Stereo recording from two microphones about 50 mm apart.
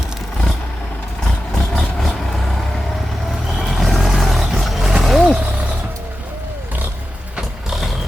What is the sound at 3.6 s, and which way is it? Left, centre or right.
Vehicle, centre.